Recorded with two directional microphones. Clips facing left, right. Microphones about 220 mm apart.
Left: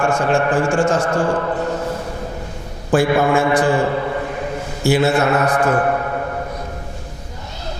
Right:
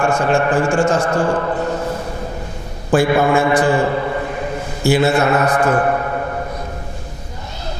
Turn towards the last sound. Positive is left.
turn(degrees=-25)  # may be behind; listen again after turning